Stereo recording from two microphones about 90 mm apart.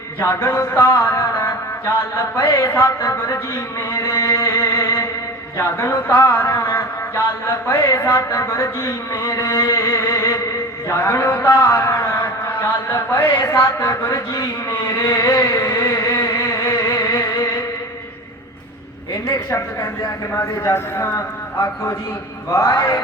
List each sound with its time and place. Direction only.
0.2 s a man's voice: 30° left (ahead or behind)
5.5 s a man's voice: 35° left (ahead or behind)
6.1 s speech: 20° left (ahead or behind)
6.6 s a sound: 30° left (ahead or behind)
7.7 s a man's voice: 30° left (ahead or behind)
14.1 s a sound: 40° left (ahead or behind)
19.3 s a man's voice: 35° left (ahead or behind)
20.7 s a man's voice: 30° left (ahead or behind)
22.7 s chant: 45° left (ahead or behind)